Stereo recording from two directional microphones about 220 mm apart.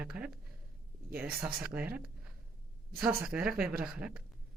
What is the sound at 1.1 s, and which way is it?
Speech, 5° right (ahead or behind).